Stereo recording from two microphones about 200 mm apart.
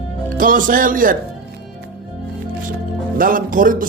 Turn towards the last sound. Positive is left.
turn(degrees=-45)  # may be behind; listen again after turning